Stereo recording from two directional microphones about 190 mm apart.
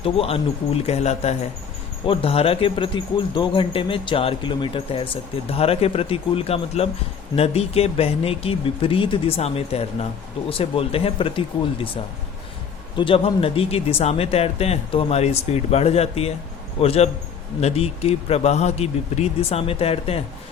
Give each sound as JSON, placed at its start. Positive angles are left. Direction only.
{"t": 0.0, "sound": "speech", "side_deg": 30}
{"t": 13.0, "sound": "speech", "side_deg": 30}